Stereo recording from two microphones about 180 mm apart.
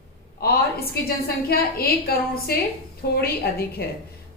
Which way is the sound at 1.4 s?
60° left (ahead or behind).